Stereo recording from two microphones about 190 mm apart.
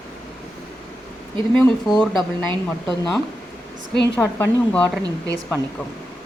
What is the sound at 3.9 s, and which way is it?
Speech, 65° left (ahead or behind).